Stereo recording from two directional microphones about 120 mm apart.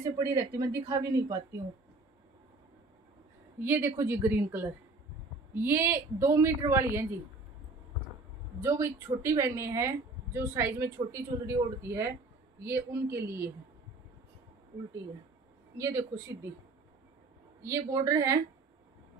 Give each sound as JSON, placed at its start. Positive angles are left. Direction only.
{"t": 0.0, "sound": "a woman's voice", "side_deg": -30}
{"t": 3.6, "sound": "a woman's voice", "side_deg": -20}
{"t": 8.5, "sound": "a woman's voice", "side_deg": -25}
{"t": 15.8, "sound": "a woman's voice", "side_deg": -25}
{"t": 17.6, "sound": "a woman's voice", "side_deg": -25}